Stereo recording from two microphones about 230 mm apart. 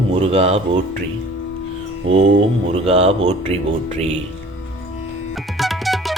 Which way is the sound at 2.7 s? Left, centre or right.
Right.